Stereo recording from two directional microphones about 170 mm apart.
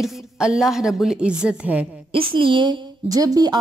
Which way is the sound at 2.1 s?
30° right (ahead or behind).